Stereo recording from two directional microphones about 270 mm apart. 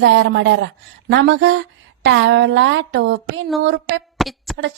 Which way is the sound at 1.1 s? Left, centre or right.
Right.